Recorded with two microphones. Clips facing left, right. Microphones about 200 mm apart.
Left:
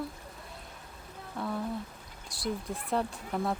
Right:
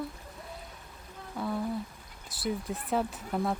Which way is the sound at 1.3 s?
Centre (ahead or behind).